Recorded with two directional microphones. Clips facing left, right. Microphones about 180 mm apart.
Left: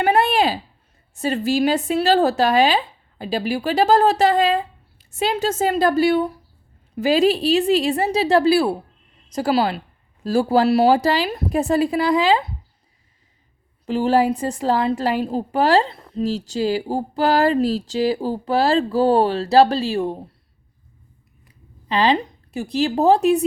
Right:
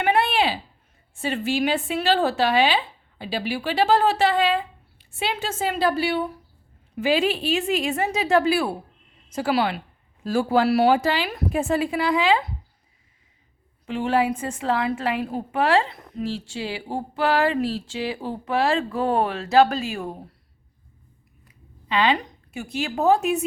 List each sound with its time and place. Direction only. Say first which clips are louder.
0.0 s a sound: left 4 dB; 40° left (ahead or behind)
1.1 s a woman's voice: left 4 dB; 40° left (ahead or behind)
13.8 s a woman's voice: left 5 dB; 35° left (ahead or behind)
21.4 s speech: left 4 dB; 35° left (ahead or behind)